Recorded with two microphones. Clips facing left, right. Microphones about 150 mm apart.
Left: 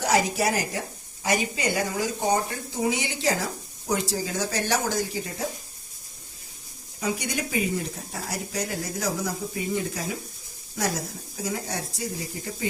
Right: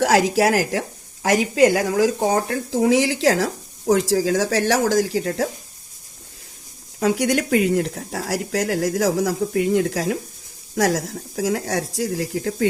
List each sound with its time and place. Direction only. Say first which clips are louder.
0.0 s a woman's voice: right 7 dB; 90° right
7.0 s a woman's voice: right 9 dB; 90° right
10.8 s a woman's voice: right 9 dB; 90° right